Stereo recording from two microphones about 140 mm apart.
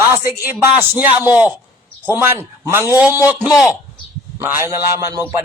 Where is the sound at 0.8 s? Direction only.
15° right (ahead or behind).